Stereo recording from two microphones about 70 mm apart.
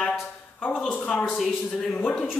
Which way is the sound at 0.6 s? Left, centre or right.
Centre.